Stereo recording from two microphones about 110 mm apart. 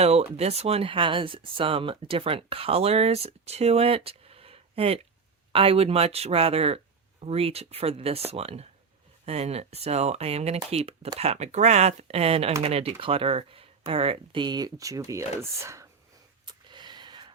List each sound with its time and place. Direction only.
0.0 s speech: 75° right (ahead or behind)
11.2 s speech: 80° right; by 15.9 s 25° right (ahead or behind)
16.5 s a sound: 45° right (ahead or behind)